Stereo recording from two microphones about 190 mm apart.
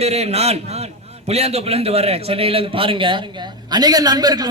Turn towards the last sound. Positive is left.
turn(degrees=-20)  # may be behind; listen again after turning